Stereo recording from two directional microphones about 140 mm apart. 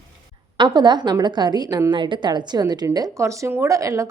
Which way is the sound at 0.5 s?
30° right (ahead or behind).